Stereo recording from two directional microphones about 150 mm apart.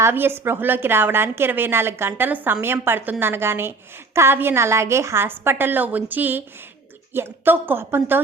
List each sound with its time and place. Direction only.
0.0 s a woman's voice: 15° right (ahead or behind)